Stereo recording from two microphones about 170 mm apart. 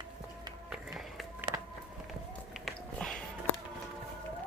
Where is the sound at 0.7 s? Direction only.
5° right (ahead or behind).